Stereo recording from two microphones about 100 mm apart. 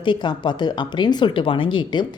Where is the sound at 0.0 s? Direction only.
50° left (ahead or behind).